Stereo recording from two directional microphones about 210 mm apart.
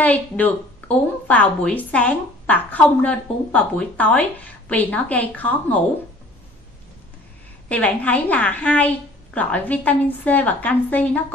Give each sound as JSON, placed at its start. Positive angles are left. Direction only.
{"t": 0.0, "sound": "a woman's voice", "side_deg": 5}
{"t": 7.6, "sound": "a woman's voice", "side_deg": 5}